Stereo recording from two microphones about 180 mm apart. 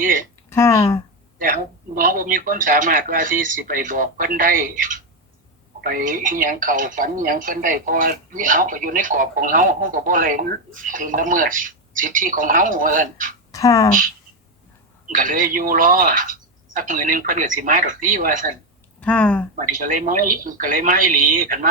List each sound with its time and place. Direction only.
0.0 s speech: 45° right (ahead or behind)
0.5 s speech: 15° left (ahead or behind)
1.4 s speech: 45° right (ahead or behind)
13.5 s speech: 20° left (ahead or behind)
15.1 s speech: 50° right (ahead or behind)
18.9 s speech: 5° left (ahead or behind)
19.5 s speech: 45° right (ahead or behind)